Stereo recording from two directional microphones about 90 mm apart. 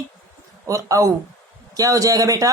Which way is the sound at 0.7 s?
40° right (ahead or behind).